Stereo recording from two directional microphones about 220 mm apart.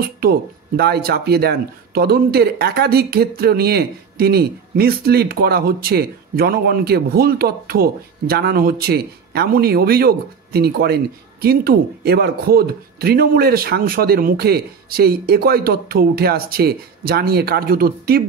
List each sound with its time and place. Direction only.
0.2 s speech: 45° right (ahead or behind)